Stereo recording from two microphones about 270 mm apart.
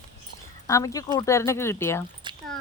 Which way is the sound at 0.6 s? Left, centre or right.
Centre.